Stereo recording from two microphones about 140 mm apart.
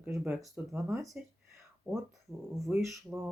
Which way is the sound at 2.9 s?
15° right (ahead or behind).